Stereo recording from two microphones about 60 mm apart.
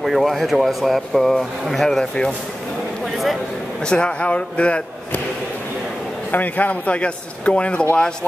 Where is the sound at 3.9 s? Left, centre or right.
Centre.